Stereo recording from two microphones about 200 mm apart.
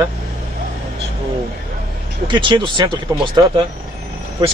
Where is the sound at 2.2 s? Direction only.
25° right (ahead or behind).